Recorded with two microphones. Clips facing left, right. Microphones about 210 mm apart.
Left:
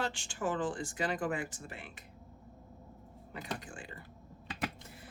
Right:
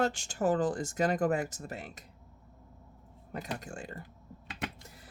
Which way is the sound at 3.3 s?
45° right (ahead or behind).